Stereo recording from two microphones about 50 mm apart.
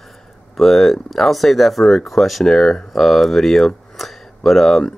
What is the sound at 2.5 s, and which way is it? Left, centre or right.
Speech, centre.